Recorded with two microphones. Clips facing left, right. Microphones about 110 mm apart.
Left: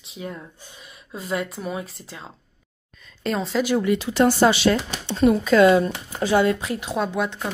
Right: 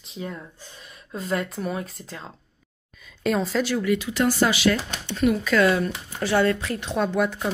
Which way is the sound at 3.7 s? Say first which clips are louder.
Left 6 dB; 30° left (ahead or behind).